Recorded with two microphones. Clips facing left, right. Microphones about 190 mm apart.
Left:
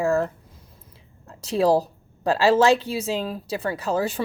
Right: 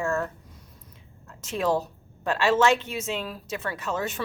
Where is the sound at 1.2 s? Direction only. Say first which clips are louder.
Left 6 dB; 35° left (ahead or behind).